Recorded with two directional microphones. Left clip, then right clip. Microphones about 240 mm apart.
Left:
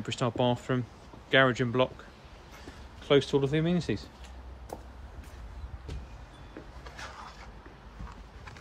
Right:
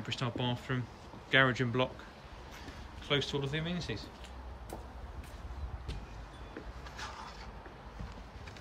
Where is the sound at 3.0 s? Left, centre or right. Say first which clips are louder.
Left 9 dB; centre.